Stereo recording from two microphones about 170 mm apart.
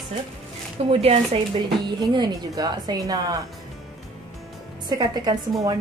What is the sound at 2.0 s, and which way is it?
A woman's voice, 25° right (ahead or behind).